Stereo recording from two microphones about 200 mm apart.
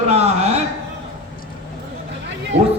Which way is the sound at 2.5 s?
55° right (ahead or behind).